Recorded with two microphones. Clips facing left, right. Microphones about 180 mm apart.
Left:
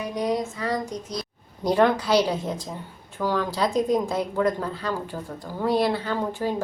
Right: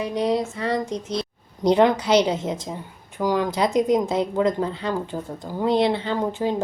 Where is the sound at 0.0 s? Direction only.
25° right (ahead or behind).